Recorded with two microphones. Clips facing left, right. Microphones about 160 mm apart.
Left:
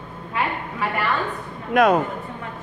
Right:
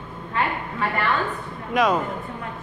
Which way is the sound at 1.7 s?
55° left (ahead or behind).